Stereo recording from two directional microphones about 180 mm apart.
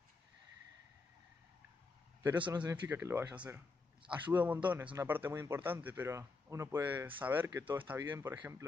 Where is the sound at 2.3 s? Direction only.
25° right (ahead or behind).